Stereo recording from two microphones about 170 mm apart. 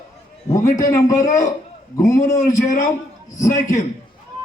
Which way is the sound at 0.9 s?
20° left (ahead or behind).